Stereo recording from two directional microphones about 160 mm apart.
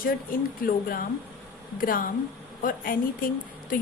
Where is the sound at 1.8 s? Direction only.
60° left (ahead or behind).